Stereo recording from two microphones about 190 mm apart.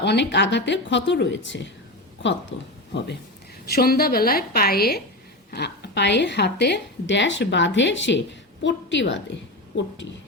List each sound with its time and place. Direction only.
0.0 s a woman's voice: 65° left (ahead or behind)
3.7 s a woman's voice: 55° left (ahead or behind); by 9.2 s 70° left (ahead or behind)